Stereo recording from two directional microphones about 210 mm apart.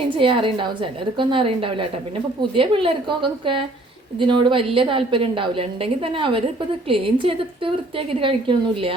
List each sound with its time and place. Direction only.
0.2 s a woman's voice: 25° right (ahead or behind)